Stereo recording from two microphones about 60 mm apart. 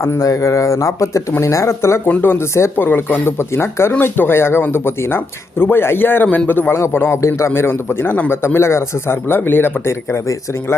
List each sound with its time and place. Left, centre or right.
0.0 s speech: left
2.7 s speech: left
6.7 s speech: left
7.2 s speech: left
10.1 s speech: left